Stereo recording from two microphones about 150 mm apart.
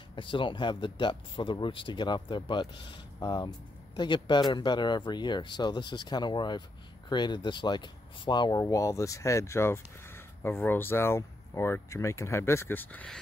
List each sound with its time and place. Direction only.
0.1 s speech: 35° left (ahead or behind); by 13.2 s 10° left (ahead or behind)